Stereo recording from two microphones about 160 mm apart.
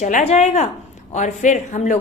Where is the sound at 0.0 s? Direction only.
50° left (ahead or behind).